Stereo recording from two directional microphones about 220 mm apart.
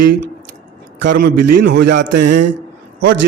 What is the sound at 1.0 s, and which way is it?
A man's voice, 50° right (ahead or behind).